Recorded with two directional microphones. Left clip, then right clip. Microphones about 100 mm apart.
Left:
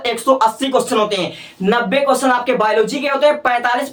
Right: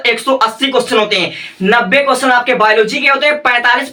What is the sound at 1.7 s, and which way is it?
Speech, 45° left (ahead or behind).